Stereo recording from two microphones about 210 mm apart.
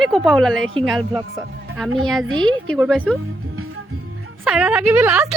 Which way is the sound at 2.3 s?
70° right (ahead or behind).